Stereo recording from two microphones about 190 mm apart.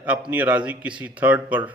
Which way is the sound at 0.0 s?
5° right (ahead or behind).